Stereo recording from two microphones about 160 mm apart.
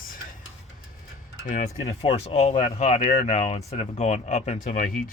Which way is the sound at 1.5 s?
50° left (ahead or behind).